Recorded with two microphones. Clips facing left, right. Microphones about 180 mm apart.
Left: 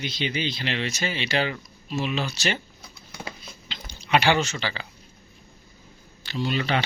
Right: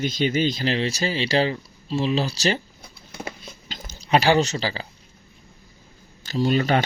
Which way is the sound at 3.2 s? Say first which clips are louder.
Right 4 dB; 45° right (ahead or behind).